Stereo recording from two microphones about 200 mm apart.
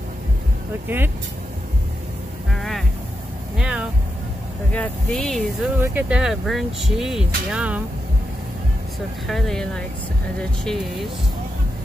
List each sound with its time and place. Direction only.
0.8 s speech: 10° right (ahead or behind)
2.5 s a sound: centre (ahead or behind)
3.5 s vehicle: 5° right (ahead or behind)
4.7 s speech: 5° left (ahead or behind)
9.3 s speech: 5° left (ahead or behind)